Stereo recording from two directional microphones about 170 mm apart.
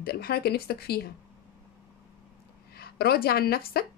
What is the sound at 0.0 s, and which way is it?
Speech, 65° left (ahead or behind).